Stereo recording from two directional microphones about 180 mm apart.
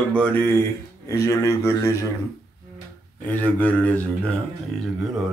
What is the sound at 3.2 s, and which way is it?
Speech, 10° left (ahead or behind).